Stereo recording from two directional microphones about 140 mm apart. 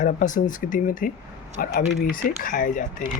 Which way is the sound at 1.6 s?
85° left.